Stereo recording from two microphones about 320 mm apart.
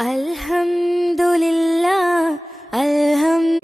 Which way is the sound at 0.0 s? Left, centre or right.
Centre.